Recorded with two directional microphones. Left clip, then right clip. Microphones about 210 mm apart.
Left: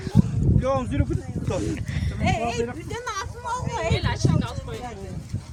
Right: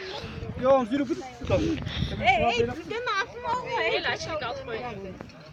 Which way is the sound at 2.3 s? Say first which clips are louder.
Right 4 dB; 50° left (ahead or behind).